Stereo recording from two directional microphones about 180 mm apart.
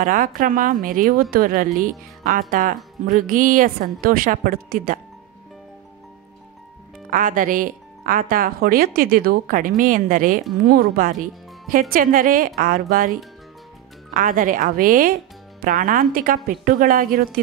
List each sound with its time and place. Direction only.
0.0 s speech: 50° right (ahead or behind)
7.1 s speech: 50° right (ahead or behind)
14.1 s speech: 50° right (ahead or behind)